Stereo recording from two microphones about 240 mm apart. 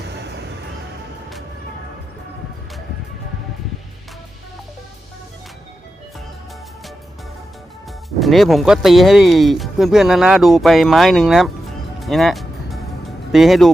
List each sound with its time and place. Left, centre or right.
0.0 s music: right
8.2 s speech: centre
11.9 s music: centre
13.3 s speech: centre